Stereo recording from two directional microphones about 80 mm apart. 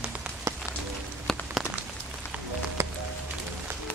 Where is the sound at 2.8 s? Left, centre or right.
Right.